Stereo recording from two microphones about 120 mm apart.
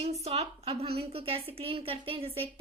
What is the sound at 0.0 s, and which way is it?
A woman's voice, 65° right (ahead or behind).